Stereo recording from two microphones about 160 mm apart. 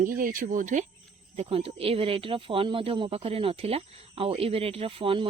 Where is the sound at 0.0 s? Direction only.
55° right (ahead or behind).